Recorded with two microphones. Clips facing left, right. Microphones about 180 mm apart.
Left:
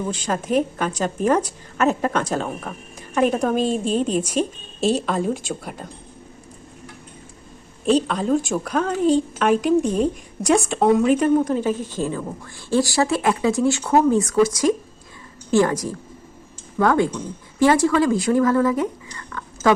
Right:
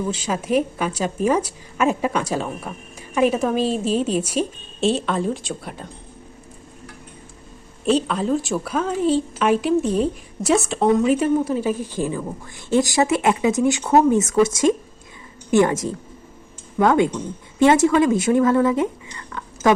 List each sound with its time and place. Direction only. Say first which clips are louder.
0.1 s a woman's voice: left 1 dB; 10° right (ahead or behind)
8.0 s a woman's voice: left 1 dB; centre (ahead or behind)
9.8 s speech: even; 45° left (ahead or behind)
10.4 s a woman's voice: left 1 dB; centre (ahead or behind); by 18.9 s 25° right (ahead or behind)
19.1 s a sound: even; 20° right (ahead or behind)